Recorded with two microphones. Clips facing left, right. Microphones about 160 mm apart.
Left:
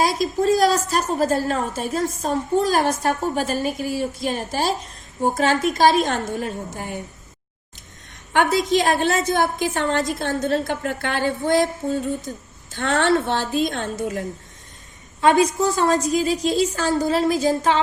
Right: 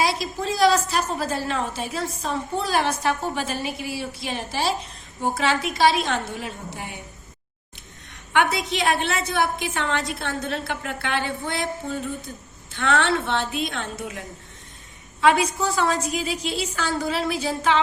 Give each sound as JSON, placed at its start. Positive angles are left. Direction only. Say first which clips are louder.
{"t": 0.0, "sound": "a woman's voice", "louder": "left 5 dB", "side_deg": 45}
{"t": 8.3, "sound": "a woman's voice", "louder": "left 4 dB", "side_deg": 40}